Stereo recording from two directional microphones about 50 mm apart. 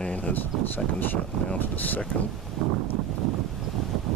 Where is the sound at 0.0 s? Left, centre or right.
Left.